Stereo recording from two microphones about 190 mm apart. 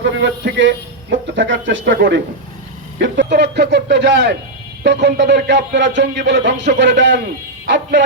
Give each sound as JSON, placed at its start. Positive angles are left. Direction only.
{"t": 0.0, "sound": "speech", "side_deg": -70}